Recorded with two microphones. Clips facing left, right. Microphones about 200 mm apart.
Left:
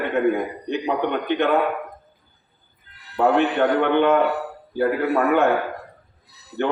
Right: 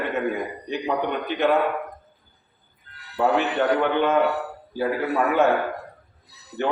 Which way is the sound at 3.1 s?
55° left (ahead or behind).